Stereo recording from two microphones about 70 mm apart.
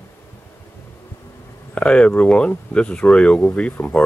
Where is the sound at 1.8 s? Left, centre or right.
Centre.